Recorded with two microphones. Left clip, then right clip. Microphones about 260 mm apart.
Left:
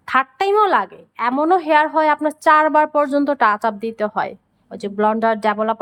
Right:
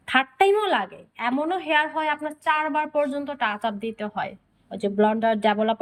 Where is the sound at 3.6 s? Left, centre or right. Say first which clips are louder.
Left 8 dB; centre.